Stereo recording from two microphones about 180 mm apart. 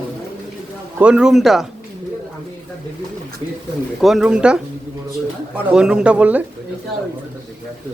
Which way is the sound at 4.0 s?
Centre (ahead or behind).